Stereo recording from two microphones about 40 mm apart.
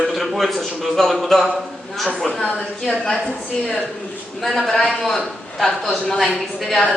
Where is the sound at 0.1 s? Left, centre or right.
Centre.